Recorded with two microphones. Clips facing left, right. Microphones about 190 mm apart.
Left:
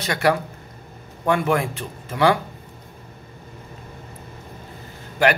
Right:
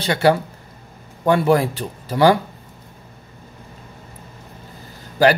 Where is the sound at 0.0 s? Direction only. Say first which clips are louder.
Right 4 dB; 30° right (ahead or behind).